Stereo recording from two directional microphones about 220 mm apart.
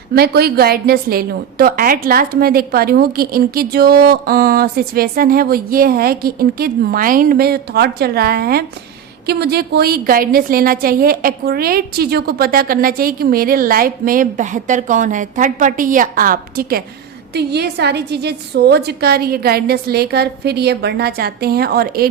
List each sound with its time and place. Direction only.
0.1 s a woman's voice: 45° right (ahead or behind)